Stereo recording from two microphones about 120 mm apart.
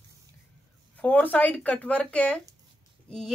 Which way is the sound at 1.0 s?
15° left (ahead or behind).